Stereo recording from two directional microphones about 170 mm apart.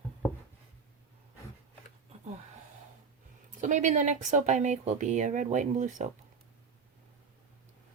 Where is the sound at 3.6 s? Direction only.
45° right (ahead or behind).